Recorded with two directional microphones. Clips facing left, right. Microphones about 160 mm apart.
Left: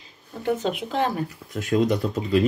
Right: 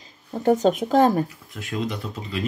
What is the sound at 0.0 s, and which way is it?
Speech, 40° right (ahead or behind).